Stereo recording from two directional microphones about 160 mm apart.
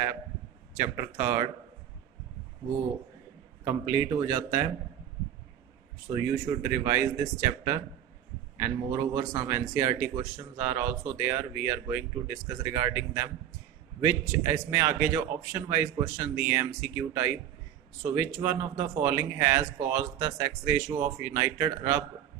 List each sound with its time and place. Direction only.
0.7 s speech: 20° right (ahead or behind)
3.6 s speech: 15° right (ahead or behind)
6.3 s speech: 15° right (ahead or behind)